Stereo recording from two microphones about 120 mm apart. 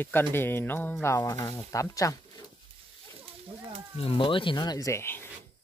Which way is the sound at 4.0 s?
50° left (ahead or behind).